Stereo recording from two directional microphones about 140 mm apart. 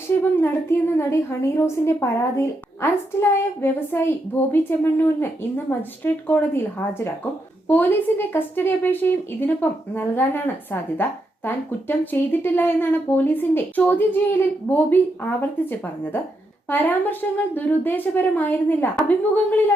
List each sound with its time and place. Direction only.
0.2 s a woman's voice: 15° left (ahead or behind)